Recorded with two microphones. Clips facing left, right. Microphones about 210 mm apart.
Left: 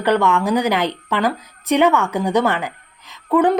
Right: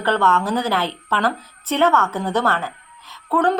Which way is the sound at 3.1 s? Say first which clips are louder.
Left 4 dB; 15° left (ahead or behind).